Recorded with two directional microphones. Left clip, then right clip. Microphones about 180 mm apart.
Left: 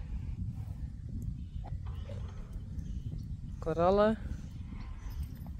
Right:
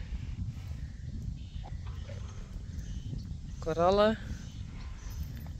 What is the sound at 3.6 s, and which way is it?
Speech, centre (ahead or behind).